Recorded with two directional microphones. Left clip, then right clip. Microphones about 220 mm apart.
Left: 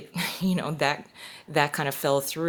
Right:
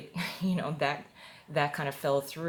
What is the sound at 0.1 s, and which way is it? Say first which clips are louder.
Speech: left 6 dB; 50° left (ahead or behind).